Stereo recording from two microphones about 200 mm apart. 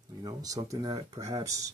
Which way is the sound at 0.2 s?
20° right (ahead or behind).